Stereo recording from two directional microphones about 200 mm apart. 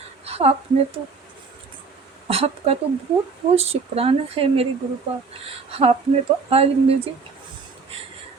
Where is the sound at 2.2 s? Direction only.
30° right (ahead or behind).